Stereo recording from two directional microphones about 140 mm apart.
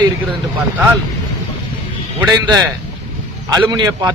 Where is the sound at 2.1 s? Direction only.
20° right (ahead or behind).